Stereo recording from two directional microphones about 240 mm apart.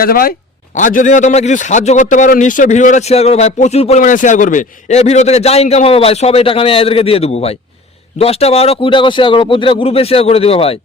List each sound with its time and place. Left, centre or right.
0.0 s a man's voice: left